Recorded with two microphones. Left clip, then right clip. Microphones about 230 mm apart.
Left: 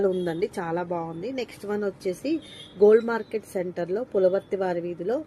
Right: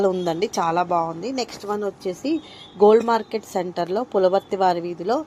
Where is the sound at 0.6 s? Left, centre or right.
Right.